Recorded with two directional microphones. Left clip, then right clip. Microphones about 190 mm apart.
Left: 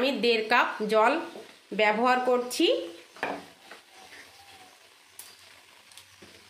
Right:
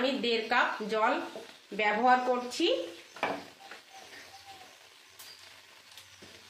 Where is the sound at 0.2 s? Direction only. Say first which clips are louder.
Left 7 dB; 55° left (ahead or behind).